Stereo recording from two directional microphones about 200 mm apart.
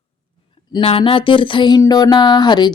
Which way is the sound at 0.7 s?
30° left (ahead or behind).